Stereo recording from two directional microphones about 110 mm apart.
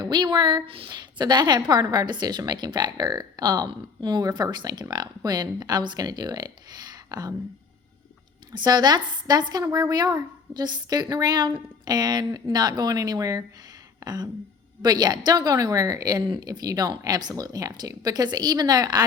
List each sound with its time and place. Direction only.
0.0 s a woman's voice: 40° right (ahead or behind)
8.5 s a woman's voice: 40° right (ahead or behind)